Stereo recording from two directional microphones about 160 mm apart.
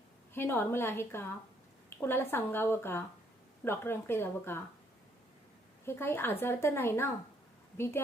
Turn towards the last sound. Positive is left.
turn(degrees=15)  # may be behind; listen again after turning